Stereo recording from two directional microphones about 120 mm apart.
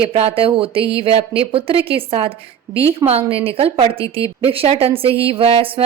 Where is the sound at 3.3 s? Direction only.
55° right (ahead or behind).